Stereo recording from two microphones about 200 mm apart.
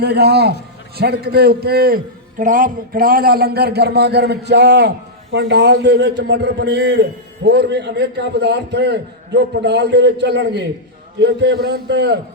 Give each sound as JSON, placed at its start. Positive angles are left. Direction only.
{"t": 0.0, "sound": "a man's voice", "side_deg": -55}